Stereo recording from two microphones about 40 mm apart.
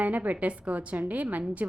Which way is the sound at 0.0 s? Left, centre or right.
Right.